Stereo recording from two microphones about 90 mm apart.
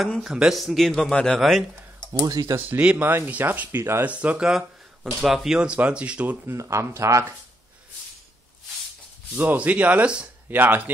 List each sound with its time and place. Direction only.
0.2 s a man's voice: 5° right (ahead or behind)
2.2 s speech: 45° right (ahead or behind)
2.6 s speech: 15° right (ahead or behind)
4.1 s speech: 15° right (ahead or behind)
6.5 s speech: 35° right (ahead or behind)
9.3 s speech: 20° right (ahead or behind)